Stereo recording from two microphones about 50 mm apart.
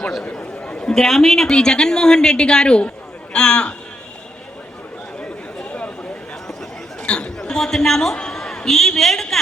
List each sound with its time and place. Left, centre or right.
0.3 s chatter: left
0.8 s a woman's voice: centre
7.0 s chatter: left
7.3 s a sound: centre
7.6 s a man's voice: centre
8.1 s a sound: centre